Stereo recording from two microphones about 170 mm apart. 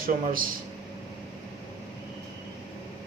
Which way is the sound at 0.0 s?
55° right (ahead or behind).